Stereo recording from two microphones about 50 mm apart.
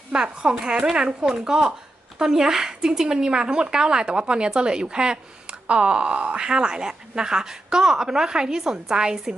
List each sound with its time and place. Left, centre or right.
0.1 s speech: centre